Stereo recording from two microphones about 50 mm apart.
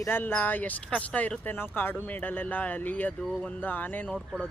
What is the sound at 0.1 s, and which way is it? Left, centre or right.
Speech, left.